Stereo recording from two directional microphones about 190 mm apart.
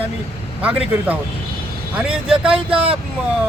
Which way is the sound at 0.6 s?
5° right (ahead or behind).